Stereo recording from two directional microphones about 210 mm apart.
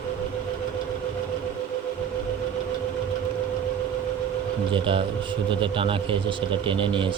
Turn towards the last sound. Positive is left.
turn(degrees=-25)  # may be behind; listen again after turning